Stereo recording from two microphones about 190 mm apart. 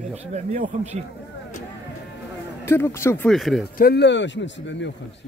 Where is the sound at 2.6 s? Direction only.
15° left (ahead or behind).